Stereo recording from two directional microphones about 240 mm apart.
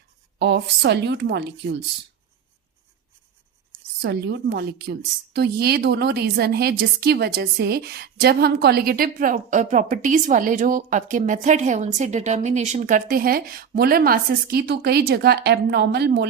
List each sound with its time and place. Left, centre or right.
0.3 s speech: right
4.0 s a woman's voice: right